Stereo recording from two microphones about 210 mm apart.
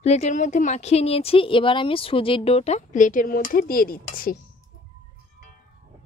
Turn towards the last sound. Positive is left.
turn(degrees=45)  # may be behind; listen again after turning